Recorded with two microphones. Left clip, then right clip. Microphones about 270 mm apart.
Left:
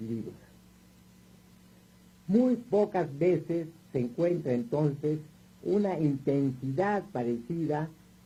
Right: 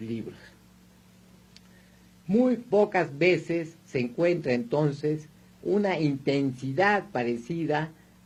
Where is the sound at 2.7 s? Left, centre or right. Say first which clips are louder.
Right 4 dB; right.